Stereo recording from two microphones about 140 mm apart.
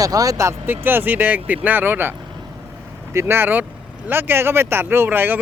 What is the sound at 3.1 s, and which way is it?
Speech, 15° right (ahead or behind).